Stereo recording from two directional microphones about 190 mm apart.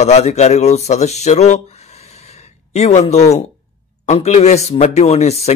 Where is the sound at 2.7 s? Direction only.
35° left (ahead or behind).